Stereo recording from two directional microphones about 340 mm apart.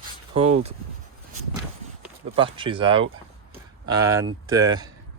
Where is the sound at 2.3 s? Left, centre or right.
Centre.